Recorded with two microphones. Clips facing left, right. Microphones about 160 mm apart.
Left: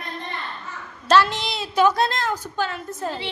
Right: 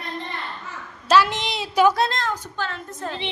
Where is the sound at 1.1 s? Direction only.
10° right (ahead or behind).